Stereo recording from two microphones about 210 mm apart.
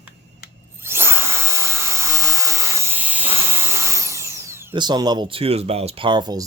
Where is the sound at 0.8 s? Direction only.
10° right (ahead or behind).